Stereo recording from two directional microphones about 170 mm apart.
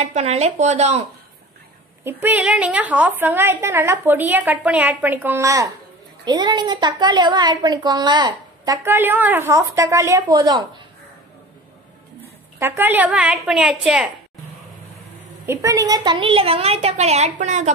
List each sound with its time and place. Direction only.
0.0 s a woman's voice: 40° right (ahead or behind)
2.0 s a woman's voice: 10° right (ahead or behind); by 8.7 s 25° right (ahead or behind)
8.8 s a woman's voice: 10° right (ahead or behind)
12.5 s a woman's voice: 10° right (ahead or behind)
15.4 s a woman's voice: 15° right (ahead or behind); by 17.7 s 45° right (ahead or behind)